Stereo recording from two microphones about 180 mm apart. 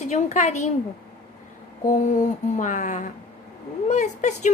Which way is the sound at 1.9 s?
45° left (ahead or behind).